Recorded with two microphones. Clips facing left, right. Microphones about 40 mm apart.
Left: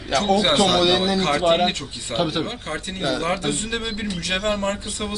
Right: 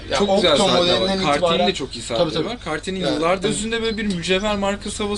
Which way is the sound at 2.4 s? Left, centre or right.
Right.